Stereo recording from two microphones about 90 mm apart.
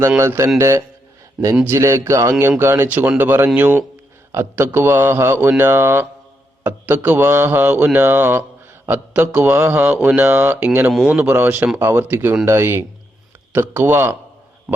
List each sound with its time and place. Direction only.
0.2 s a man's voice: 30° right (ahead or behind)